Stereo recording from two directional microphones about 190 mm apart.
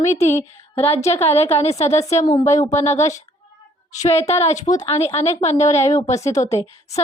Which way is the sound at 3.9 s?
35° left (ahead or behind).